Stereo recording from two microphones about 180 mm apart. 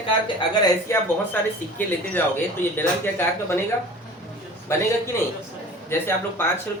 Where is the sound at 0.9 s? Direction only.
15° left (ahead or behind).